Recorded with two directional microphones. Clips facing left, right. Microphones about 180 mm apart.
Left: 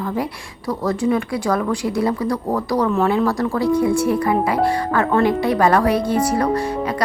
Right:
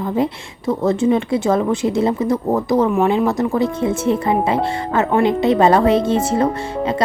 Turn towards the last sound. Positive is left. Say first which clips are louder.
# right 1 dB
turn(degrees=-25)  # may be behind; listen again after turning